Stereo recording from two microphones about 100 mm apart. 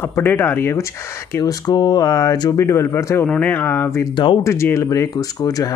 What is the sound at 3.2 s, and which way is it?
Speech, 15° left (ahead or behind).